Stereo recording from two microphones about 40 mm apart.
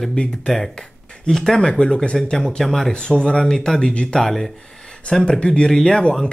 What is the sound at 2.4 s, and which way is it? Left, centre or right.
Speech, centre.